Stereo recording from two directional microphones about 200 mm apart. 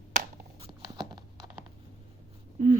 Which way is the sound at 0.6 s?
20° right (ahead or behind).